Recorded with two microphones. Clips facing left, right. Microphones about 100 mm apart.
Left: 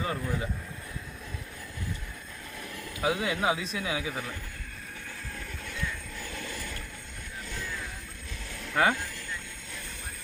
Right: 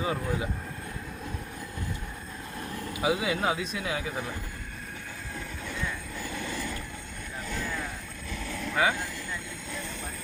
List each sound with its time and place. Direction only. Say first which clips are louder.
0.0 s speech: right 2 dB; 10° right (ahead or behind)
3.0 s speech: right 1 dB; 5° right (ahead or behind)
8.3 s vehicle: right 8 dB; 45° right (ahead or behind)
8.7 s speech: left 1 dB; 50° left (ahead or behind)